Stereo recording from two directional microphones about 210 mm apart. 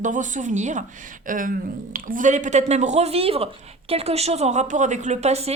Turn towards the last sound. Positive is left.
turn(degrees=-30)  # may be behind; listen again after turning